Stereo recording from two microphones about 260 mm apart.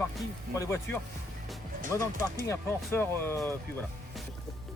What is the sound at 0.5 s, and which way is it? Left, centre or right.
Speech, centre.